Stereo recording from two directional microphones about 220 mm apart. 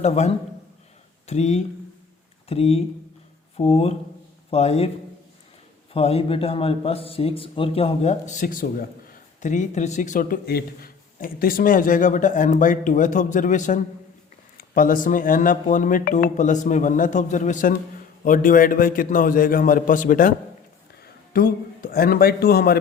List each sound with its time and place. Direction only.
0.0 s a man's voice: 30° left (ahead or behind)
5.9 s a man's voice: 25° left (ahead or behind)
21.3 s speech: 40° left (ahead or behind)